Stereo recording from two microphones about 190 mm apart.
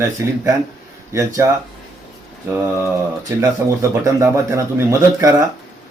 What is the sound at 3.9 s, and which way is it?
A man's voice, 15° right (ahead or behind).